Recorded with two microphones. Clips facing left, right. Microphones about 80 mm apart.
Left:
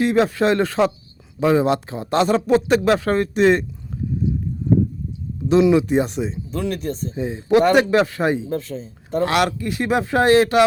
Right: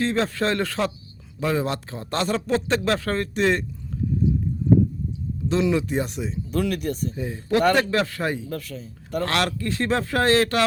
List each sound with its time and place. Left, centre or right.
0.0 s speech: centre
5.5 s speech: centre
9.2 s speech: centre